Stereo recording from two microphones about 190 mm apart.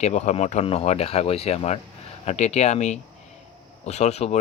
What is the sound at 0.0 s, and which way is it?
A man's voice, 35° left (ahead or behind).